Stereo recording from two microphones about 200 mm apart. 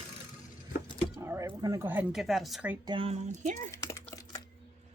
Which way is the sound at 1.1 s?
15° right (ahead or behind).